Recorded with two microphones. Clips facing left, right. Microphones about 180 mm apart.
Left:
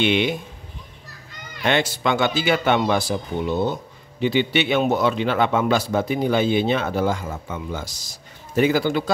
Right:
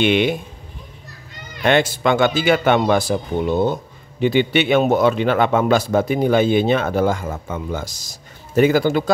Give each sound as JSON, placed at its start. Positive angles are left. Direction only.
{"t": 0.0, "sound": "a man's voice", "side_deg": -50}
{"t": 1.6, "sound": "a man's voice", "side_deg": -50}